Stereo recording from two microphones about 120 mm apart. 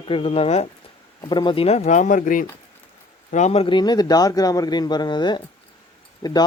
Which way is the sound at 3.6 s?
40° left (ahead or behind).